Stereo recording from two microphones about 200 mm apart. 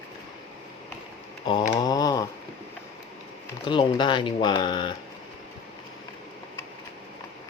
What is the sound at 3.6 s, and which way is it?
Speech, 25° left (ahead or behind).